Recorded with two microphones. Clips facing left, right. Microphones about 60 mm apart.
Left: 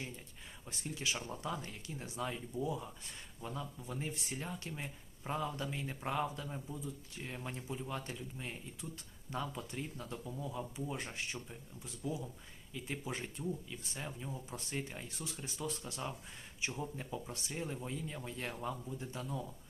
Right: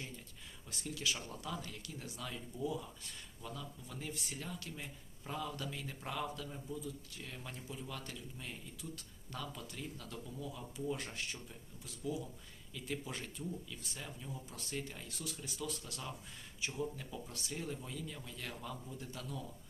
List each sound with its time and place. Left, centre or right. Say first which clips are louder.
0.7 s speech: left 1 dB; left